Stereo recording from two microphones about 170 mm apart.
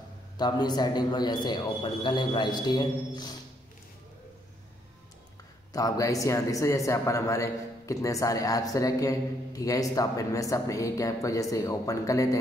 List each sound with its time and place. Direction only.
0.4 s speech: 25° left (ahead or behind)
5.7 s speech: 20° left (ahead or behind)